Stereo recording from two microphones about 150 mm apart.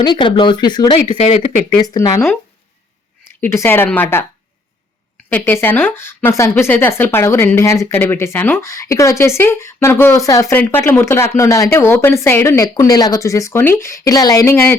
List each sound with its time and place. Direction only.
0.0 s speech: 30° left (ahead or behind)
1.8 s speech: 25° left (ahead or behind)
3.4 s a woman's voice: 15° left (ahead or behind)
5.3 s a woman's voice: 15° left (ahead or behind)